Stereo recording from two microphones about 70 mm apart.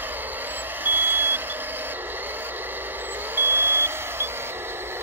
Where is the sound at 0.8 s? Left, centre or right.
Right.